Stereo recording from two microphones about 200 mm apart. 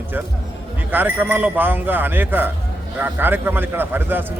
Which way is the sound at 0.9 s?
10° right (ahead or behind).